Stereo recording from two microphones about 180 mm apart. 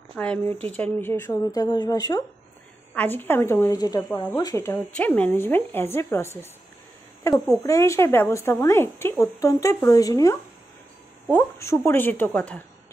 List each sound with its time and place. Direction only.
0.1 s speech: 5° left (ahead or behind)
2.9 s speech: 10° left (ahead or behind)
11.3 s speech: 15° left (ahead or behind)